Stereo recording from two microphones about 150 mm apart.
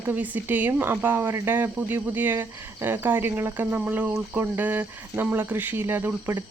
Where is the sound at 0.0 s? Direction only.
10° right (ahead or behind).